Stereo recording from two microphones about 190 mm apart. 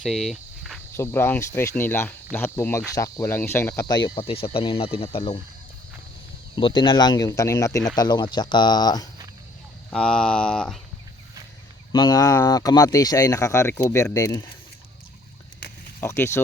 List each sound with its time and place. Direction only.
0.0 s cricket: centre (ahead or behind)
0.9 s speech: 15° left (ahead or behind); by 5.4 s 30° left (ahead or behind)
6.6 s speech: 25° left (ahead or behind)
9.9 s speech: 5° left (ahead or behind)
11.9 s speech: 20° left (ahead or behind)
16.0 s speech: 10° left (ahead or behind)